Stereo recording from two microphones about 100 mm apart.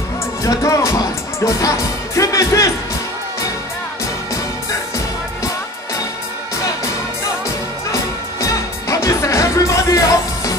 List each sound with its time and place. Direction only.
0.4 s speech: 30° left (ahead or behind)
7.9 s music: 30° left (ahead or behind)